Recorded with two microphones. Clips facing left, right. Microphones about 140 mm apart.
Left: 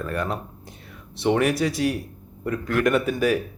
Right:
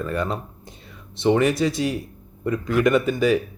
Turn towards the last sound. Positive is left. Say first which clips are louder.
# right 2 dB
turn(degrees=5)  # may be behind; listen again after turning